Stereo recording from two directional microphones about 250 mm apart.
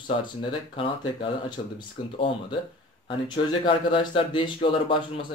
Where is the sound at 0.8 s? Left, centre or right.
Left.